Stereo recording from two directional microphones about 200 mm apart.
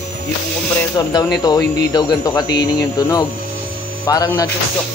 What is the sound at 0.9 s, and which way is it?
Speech, 20° left (ahead or behind).